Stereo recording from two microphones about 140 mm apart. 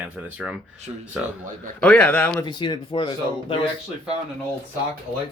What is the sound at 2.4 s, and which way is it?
Speech, 35° left (ahead or behind).